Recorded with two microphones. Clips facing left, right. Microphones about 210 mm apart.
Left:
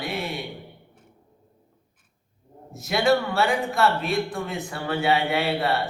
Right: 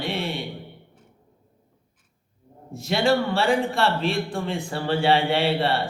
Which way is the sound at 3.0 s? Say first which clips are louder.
Even; 30° right (ahead or behind).